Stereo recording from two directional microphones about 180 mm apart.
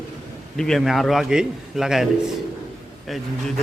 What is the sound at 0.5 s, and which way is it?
A man's voice, 5° left (ahead or behind).